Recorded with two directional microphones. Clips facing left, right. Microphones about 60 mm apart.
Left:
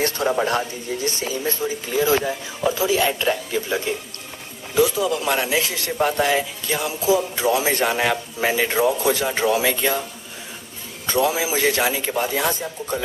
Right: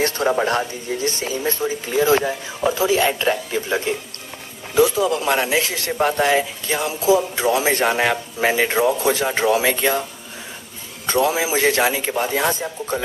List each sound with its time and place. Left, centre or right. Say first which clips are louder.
0.2 s speech: right 1 dB; centre
11.3 s speech: right 2 dB; right